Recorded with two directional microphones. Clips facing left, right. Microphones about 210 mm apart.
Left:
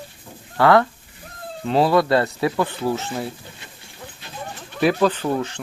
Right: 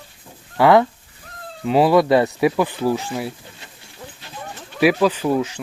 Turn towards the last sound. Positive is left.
turn(degrees=-5)  # may be behind; listen again after turning